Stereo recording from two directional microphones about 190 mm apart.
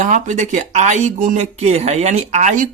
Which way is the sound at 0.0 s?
40° right (ahead or behind).